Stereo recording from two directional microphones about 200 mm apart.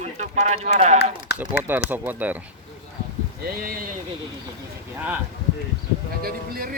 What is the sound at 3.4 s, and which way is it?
Speech, 45° right (ahead or behind).